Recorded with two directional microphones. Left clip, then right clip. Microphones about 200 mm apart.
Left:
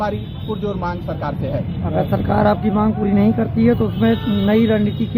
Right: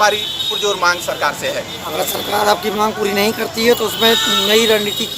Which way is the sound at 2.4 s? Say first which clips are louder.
Right 4 dB; 20° right (ahead or behind).